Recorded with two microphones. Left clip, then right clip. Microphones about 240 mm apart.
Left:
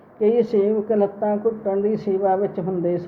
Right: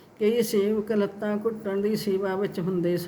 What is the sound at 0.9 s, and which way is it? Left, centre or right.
Speech, right.